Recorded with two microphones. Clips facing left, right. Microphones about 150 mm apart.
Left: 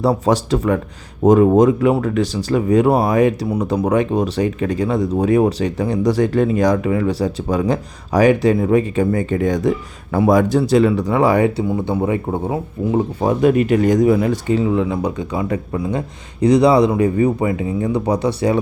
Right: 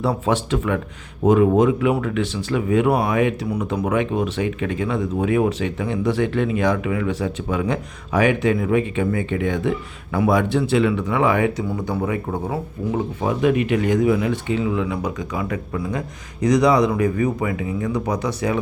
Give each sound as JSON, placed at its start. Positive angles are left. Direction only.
{"t": 0.0, "sound": "speech", "side_deg": 40}
{"t": 13.2, "sound": "speech", "side_deg": 40}